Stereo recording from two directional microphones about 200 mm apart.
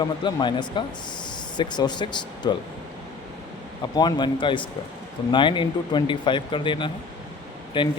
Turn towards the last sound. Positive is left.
turn(degrees=25)  # may be behind; listen again after turning